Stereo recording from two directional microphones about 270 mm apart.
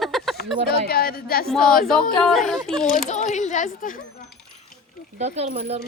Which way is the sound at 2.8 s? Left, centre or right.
Left.